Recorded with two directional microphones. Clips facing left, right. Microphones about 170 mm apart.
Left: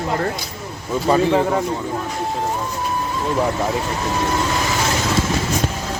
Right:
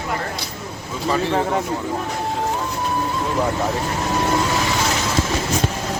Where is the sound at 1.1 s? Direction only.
35° left (ahead or behind).